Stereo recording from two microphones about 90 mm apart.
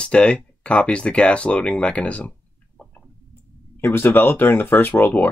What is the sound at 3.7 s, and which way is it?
Speech, 25° left (ahead or behind).